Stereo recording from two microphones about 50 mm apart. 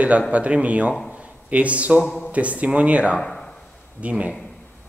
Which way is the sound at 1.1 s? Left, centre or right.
Right.